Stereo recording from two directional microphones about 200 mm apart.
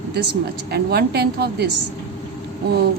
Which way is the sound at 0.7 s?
50° right (ahead or behind).